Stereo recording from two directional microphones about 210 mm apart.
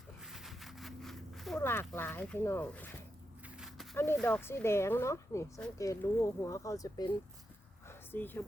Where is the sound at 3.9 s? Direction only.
10° left (ahead or behind).